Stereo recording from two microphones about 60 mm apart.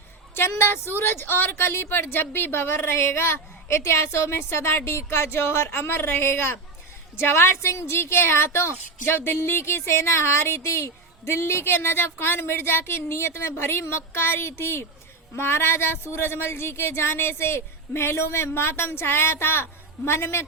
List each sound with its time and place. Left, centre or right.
0.3 s a woman's voice: left